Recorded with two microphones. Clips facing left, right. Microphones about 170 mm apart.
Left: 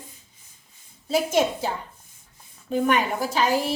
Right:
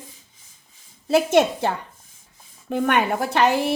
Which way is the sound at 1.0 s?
65° right (ahead or behind).